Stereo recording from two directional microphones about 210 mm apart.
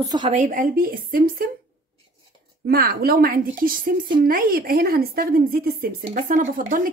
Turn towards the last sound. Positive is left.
turn(degrees=-40)  # may be behind; listen again after turning